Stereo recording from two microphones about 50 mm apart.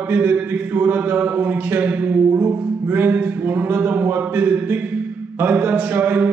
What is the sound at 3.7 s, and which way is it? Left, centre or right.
Speech, right.